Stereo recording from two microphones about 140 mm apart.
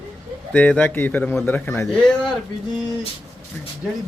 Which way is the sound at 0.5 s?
10° left (ahead or behind).